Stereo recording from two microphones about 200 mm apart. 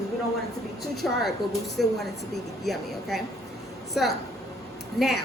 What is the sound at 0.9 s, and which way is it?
A woman's voice, centre (ahead or behind).